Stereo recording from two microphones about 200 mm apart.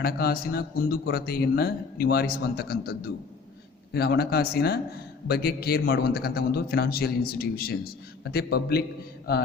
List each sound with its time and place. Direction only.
0.0 s a man's voice: 50° left (ahead or behind)
3.9 s a man's voice: 55° left (ahead or behind)